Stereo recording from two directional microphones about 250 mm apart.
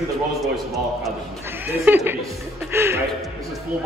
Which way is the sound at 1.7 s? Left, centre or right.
Centre.